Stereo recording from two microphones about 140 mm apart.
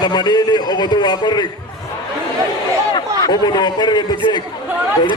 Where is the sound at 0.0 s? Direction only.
30° left (ahead or behind).